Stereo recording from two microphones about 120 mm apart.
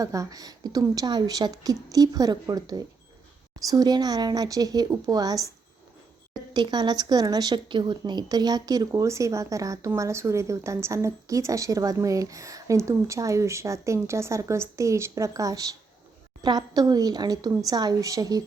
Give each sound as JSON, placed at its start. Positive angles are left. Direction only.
{"t": 0.0, "sound": "a woman's voice", "side_deg": -30}
{"t": 6.5, "sound": "a woman's voice", "side_deg": -35}